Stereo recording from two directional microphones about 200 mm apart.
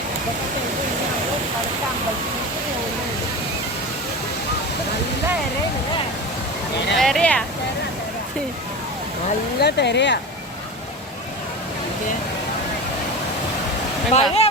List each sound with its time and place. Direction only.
7.0 s speech: 5° left (ahead or behind)
9.6 s speech: 55° left (ahead or behind)
14.1 s speech: 30° left (ahead or behind)